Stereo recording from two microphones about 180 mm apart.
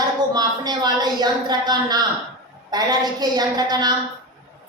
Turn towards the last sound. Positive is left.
turn(degrees=-20)  # may be behind; listen again after turning